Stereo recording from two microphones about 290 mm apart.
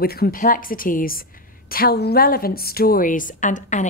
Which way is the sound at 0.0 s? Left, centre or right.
Left.